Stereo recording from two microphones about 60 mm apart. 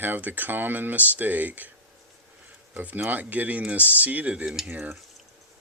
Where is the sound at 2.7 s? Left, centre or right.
Right.